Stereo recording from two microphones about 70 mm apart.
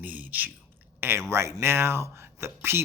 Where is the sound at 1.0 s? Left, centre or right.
Right.